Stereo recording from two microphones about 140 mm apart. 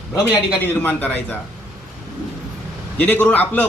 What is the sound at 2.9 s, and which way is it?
Speech, 10° left (ahead or behind).